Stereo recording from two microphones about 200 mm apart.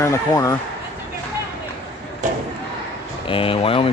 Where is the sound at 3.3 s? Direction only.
25° left (ahead or behind).